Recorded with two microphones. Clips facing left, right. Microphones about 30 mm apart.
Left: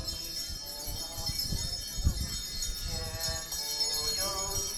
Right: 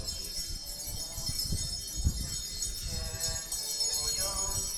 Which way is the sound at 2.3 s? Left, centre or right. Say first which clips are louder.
Left 1 dB; centre.